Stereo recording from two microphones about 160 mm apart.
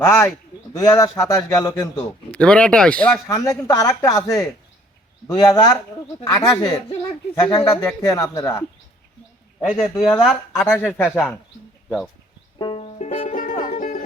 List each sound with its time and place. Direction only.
0.0 s speech: 15° left (ahead or behind)
2.3 s speech: 5° left (ahead or behind)
3.2 s speech: 20° left (ahead or behind)
10.0 s speech: centre (ahead or behind)
12.5 s music: 25° left (ahead or behind)
12.8 s music: 40° left (ahead or behind)